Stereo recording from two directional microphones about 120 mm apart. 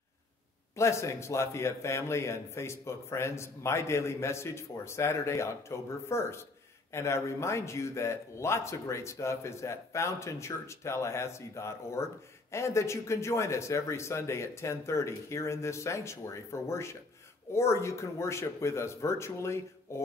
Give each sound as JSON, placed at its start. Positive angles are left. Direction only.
{"t": 0.7, "sound": "speech", "side_deg": 25}